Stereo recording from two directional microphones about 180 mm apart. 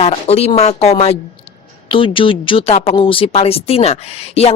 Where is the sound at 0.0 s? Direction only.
35° left (ahead or behind).